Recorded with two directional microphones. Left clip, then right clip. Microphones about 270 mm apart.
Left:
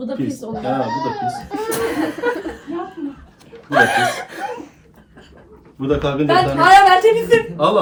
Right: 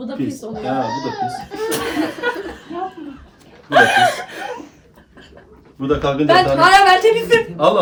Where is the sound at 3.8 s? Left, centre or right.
Centre.